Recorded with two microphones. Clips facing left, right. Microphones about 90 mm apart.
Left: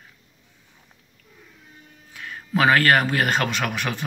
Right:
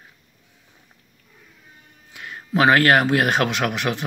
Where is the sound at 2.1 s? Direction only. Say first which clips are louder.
Right 1 dB; 10° right (ahead or behind).